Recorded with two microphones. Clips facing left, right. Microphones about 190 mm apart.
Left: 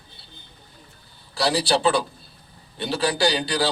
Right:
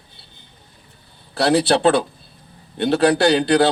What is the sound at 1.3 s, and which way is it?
A man's voice, 60° right (ahead or behind).